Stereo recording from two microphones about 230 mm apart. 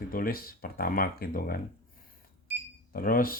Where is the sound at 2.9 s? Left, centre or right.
Left.